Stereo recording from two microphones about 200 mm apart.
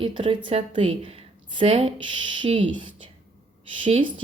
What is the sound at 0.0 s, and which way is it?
A woman's voice, 25° right (ahead or behind).